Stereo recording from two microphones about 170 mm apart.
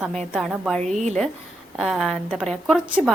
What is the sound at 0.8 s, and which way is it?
Speech, 45° right (ahead or behind).